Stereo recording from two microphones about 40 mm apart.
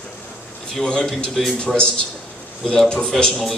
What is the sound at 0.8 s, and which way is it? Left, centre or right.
Speech, centre.